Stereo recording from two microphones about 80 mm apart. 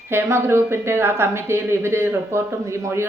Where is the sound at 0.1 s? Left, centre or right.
Right.